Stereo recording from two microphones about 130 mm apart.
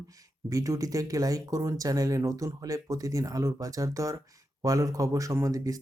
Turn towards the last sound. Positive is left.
turn(degrees=-25)  # may be behind; listen again after turning